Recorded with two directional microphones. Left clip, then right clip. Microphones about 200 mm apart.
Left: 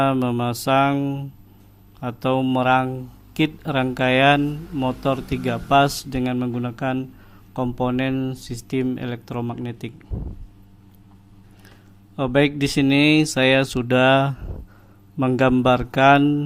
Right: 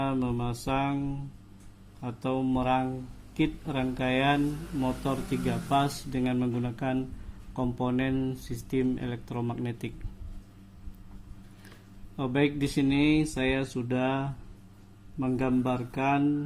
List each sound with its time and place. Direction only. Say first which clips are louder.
0.0 s mantra: left 10 dB; 30° left (ahead or behind)
2.0 s speech: left 10 dB; 30° left (ahead or behind); by 9.9 s 15° left (ahead or behind)
12.1 s speech: left 9 dB; 25° left (ahead or behind)
15.2 s mantra: left 11 dB; 35° left (ahead or behind)